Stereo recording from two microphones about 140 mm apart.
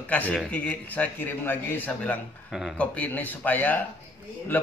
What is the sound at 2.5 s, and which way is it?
Speech, 5° right (ahead or behind).